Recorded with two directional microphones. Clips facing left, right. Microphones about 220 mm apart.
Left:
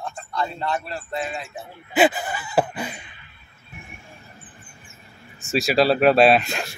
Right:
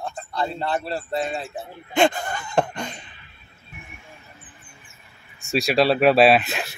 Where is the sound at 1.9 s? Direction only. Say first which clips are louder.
Left 1 dB; 5° left (ahead or behind).